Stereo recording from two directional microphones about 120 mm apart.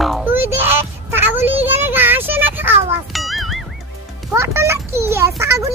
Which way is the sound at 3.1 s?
Centre (ahead or behind).